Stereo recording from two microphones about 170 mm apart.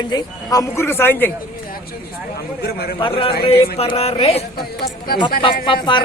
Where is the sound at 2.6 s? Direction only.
70° left (ahead or behind).